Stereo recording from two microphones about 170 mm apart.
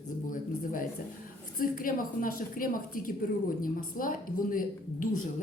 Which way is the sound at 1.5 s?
55° left (ahead or behind).